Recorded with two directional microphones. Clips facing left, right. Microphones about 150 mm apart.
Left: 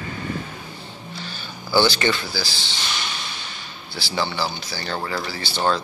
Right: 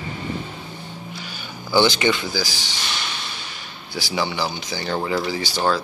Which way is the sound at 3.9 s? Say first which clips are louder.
Right 1 dB; 15° right (ahead or behind).